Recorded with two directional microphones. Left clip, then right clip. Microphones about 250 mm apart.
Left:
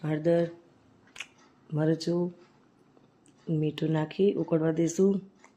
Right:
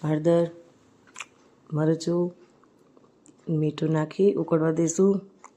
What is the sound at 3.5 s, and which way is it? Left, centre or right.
Speech, centre.